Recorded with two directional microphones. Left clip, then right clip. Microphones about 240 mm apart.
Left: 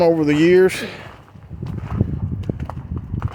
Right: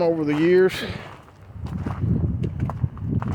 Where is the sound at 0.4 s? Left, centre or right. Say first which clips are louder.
Left 3 dB; left.